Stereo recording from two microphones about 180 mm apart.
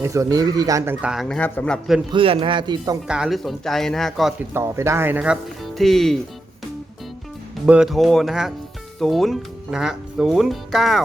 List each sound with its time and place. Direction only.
0.0 s speech: 15° right (ahead or behind)
1.0 s speech: centre (ahead or behind)
2.1 s speech: 30° right (ahead or behind)
3.1 s speech: centre (ahead or behind)
4.5 s speech: 15° right (ahead or behind); by 6.1 s centre (ahead or behind)
7.7 s speech: 5° right (ahead or behind)